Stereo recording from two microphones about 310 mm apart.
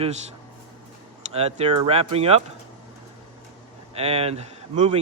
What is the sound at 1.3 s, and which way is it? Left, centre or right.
A man's voice, centre.